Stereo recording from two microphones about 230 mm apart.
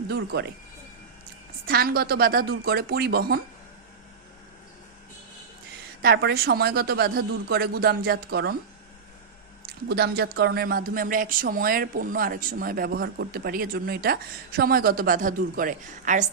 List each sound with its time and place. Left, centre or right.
0.1 s speech: right
1.6 s speech: right
6.0 s speech: right
9.9 s speech: right